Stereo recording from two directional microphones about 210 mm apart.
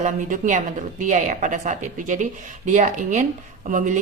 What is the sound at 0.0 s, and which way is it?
A woman's voice, 35° right (ahead or behind).